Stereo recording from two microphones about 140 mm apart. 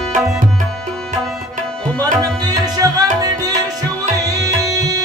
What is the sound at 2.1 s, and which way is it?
Tabla, 30° right (ahead or behind).